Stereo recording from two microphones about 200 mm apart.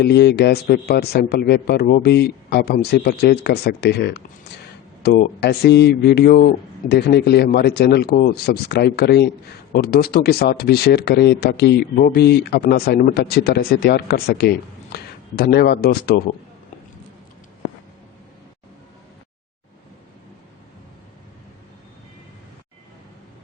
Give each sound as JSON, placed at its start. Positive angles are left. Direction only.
{"t": 0.0, "sound": "a man's voice", "side_deg": 55}